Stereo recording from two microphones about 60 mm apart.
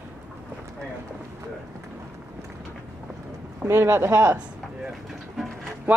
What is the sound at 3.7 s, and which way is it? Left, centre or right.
Speech, right.